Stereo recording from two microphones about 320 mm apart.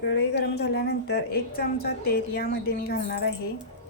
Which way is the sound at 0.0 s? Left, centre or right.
Left.